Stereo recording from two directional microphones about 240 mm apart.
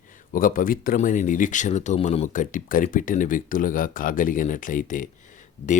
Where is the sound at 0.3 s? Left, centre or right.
Left.